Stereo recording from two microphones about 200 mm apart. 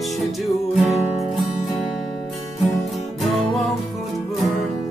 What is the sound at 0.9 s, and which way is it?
Music, 30° left (ahead or behind).